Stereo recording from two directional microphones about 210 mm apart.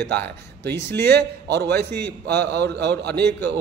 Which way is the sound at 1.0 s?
50° right (ahead or behind).